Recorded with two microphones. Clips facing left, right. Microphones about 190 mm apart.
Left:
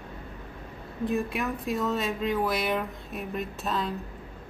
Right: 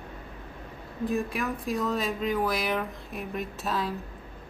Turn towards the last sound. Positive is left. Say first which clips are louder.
# even
turn(degrees=0)  # may be behind; listen again after turning